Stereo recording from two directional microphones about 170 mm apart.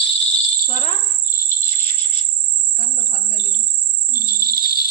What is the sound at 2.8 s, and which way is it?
Bird, 60° left (ahead or behind).